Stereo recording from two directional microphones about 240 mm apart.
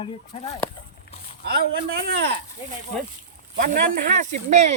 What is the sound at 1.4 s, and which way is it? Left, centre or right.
Speech, right.